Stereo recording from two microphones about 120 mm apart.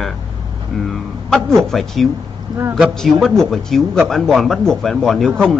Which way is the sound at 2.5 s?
35° right (ahead or behind).